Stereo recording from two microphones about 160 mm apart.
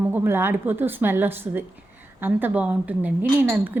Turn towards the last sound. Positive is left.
turn(degrees=-15)  # may be behind; listen again after turning